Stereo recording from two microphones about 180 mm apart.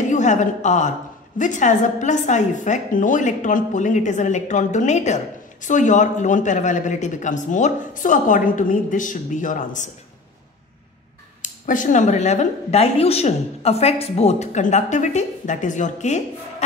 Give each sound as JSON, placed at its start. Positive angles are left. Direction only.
{"t": 0.1, "sound": "a woman's voice", "side_deg": 40}
{"t": 11.4, "sound": "speech", "side_deg": 45}